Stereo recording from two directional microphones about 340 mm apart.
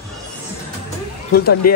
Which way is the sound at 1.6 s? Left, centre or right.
Left.